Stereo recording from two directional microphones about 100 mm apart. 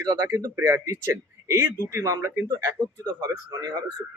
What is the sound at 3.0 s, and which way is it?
Speech, 45° right (ahead or behind).